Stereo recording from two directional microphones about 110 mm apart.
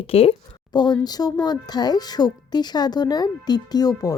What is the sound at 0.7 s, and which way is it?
Speech, 40° left (ahead or behind).